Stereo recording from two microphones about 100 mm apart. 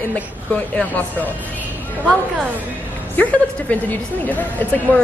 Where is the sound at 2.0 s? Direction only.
15° right (ahead or behind).